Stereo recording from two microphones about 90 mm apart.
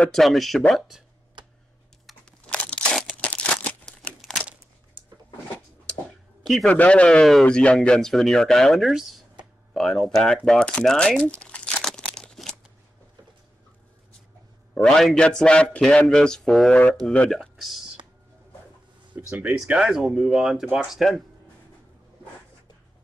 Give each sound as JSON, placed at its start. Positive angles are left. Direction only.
{"t": 0.1, "sound": "speech", "side_deg": 0}
{"t": 2.4, "sound": "crunch", "side_deg": 15}
{"t": 3.2, "sound": "crumpling", "side_deg": 15}
{"t": 3.8, "sound": "crumpling", "side_deg": 0}
{"t": 6.4, "sound": "a man's voice", "side_deg": 0}
{"t": 6.7, "sound": "a man's voice", "side_deg": 15}
{"t": 11.2, "sound": "crumpling", "side_deg": 15}
{"t": 14.7, "sound": "a man's voice", "side_deg": 5}
{"t": 19.1, "sound": "speech", "side_deg": -15}
{"t": 19.5, "sound": "speech", "side_deg": -5}